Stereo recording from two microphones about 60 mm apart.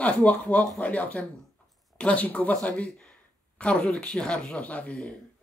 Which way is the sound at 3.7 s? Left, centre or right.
Centre.